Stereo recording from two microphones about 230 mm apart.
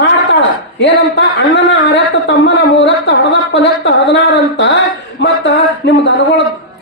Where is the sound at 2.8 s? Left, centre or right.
Left.